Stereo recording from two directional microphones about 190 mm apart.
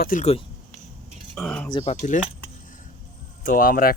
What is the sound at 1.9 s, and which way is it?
Speech, 40° left (ahead or behind).